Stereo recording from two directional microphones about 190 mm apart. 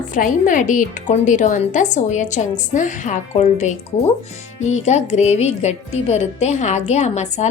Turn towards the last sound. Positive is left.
turn(degrees=35)  # may be behind; listen again after turning